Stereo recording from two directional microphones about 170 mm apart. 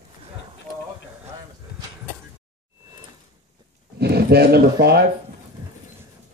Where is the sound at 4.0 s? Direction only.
70° right (ahead or behind).